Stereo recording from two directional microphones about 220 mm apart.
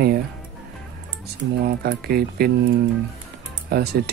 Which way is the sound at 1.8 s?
45° right (ahead or behind).